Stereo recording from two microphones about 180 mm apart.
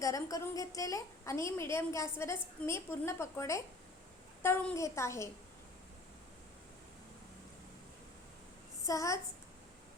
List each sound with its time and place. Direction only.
0.0 s a woman's voice: 20° left (ahead or behind)
8.9 s a woman's voice: 15° left (ahead or behind)